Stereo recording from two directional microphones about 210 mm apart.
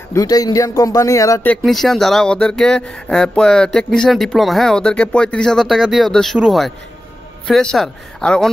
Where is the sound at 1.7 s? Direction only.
Centre (ahead or behind).